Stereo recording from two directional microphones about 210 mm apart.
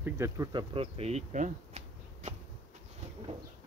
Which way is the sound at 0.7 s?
25° right (ahead or behind).